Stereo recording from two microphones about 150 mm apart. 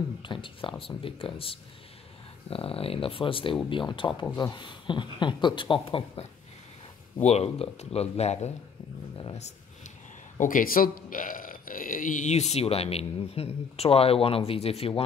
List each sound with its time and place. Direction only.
0.2 s speech: 35° left (ahead or behind)
10.3 s speech: 60° left (ahead or behind); by 15.0 s 40° left (ahead or behind)